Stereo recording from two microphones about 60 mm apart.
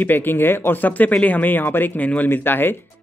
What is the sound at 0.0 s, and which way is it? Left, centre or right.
Speech, left.